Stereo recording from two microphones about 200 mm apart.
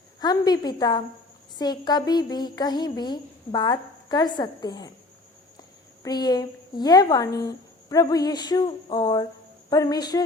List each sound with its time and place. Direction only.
0.2 s speech: 20° left (ahead or behind)
6.0 s speech: 20° left (ahead or behind)